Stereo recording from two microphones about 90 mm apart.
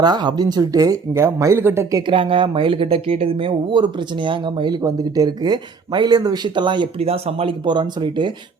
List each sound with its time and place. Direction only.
0.0 s speech: 50° right (ahead or behind); by 1.9 s 25° right (ahead or behind)
2.0 s speech: 75° right (ahead or behind); by 4.8 s 60° right (ahead or behind)
4.8 s speech: 40° right (ahead or behind); by 8.3 s 55° right (ahead or behind)